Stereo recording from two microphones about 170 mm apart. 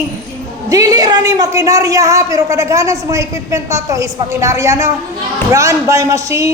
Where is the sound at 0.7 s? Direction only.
20° right (ahead or behind).